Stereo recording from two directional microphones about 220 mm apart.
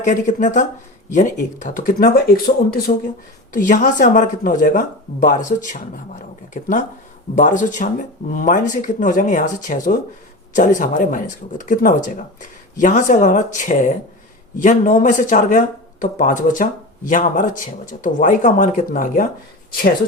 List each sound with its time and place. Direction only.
0.0 s speech: 35° left (ahead or behind)